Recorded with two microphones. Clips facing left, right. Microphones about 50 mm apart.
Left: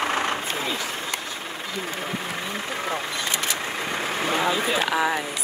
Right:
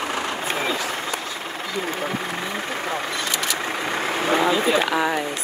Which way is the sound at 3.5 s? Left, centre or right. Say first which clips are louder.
Right 3 dB; right.